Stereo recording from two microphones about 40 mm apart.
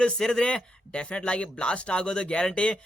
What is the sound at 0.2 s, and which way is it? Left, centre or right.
Speech, centre.